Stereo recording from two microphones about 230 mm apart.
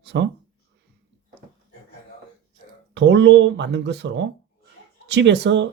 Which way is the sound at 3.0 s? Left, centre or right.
Right.